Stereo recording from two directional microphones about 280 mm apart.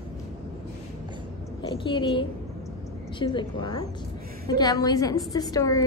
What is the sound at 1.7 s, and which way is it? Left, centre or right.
A woman's voice, centre.